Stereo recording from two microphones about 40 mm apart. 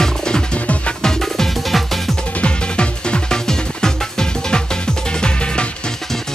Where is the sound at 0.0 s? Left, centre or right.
Centre.